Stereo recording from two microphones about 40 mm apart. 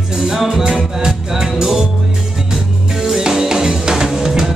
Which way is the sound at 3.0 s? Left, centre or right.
Centre.